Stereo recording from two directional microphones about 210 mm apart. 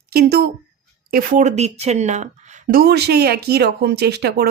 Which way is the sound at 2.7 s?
50° right (ahead or behind).